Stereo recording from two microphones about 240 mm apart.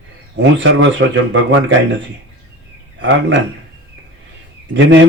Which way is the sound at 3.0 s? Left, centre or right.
Right.